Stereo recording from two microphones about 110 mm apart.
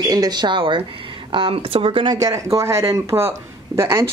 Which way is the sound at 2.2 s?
30° right (ahead or behind).